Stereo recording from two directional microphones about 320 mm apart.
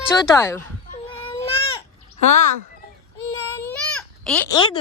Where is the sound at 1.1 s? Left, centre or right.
Centre.